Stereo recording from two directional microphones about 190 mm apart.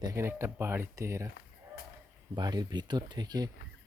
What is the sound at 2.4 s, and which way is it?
Speech, 20° right (ahead or behind).